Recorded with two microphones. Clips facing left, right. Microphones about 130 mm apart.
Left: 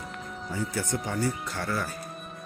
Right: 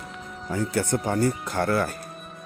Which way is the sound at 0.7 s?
60° right (ahead or behind).